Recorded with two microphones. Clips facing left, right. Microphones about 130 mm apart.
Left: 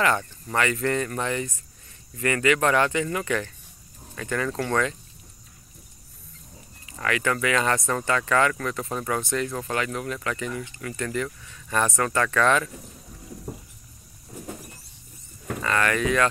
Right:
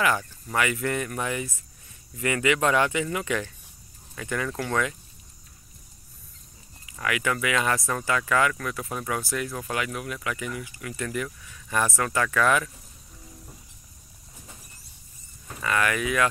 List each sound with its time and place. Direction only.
0.0 s speech: 5° right (ahead or behind)
7.0 s speech: 10° right (ahead or behind)
13.5 s rodents: 50° left (ahead or behind)
15.6 s speech: 10° right (ahead or behind)